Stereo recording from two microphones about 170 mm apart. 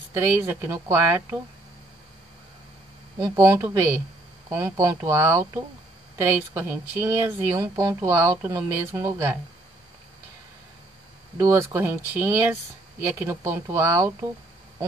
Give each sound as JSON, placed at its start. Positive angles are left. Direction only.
{"t": 0.1, "sound": "speech", "side_deg": -15}
{"t": 3.2, "sound": "speech", "side_deg": -20}
{"t": 11.3, "sound": "speech", "side_deg": -15}